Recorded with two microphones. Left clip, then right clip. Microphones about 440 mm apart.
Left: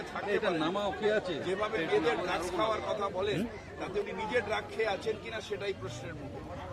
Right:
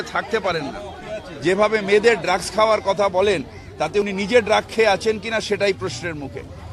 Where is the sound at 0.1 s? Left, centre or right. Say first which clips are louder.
Right 13 dB; right.